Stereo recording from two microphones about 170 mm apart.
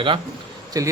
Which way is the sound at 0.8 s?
20° right (ahead or behind).